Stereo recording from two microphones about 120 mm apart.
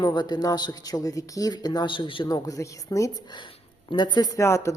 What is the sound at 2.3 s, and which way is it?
Speech, 30° left (ahead or behind).